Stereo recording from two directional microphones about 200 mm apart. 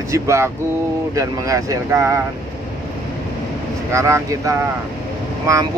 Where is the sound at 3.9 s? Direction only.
15° right (ahead or behind).